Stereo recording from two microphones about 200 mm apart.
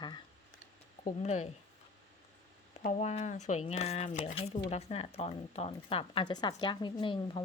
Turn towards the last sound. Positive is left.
turn(degrees=25)  # may be behind; listen again after turning